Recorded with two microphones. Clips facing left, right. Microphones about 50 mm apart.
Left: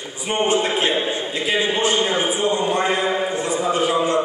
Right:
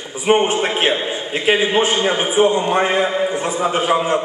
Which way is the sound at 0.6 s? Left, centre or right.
Right.